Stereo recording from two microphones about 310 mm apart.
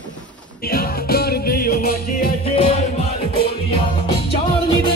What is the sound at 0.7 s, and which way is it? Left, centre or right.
Music, left.